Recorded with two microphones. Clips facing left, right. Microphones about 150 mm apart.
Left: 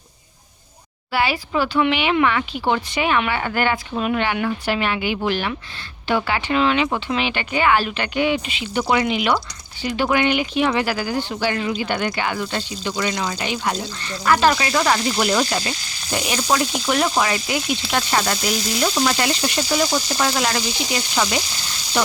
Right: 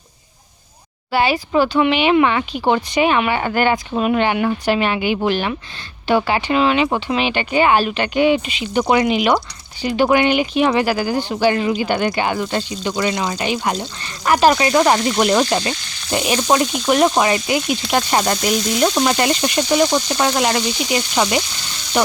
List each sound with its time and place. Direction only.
1.1 s speech: 20° right (ahead or behind)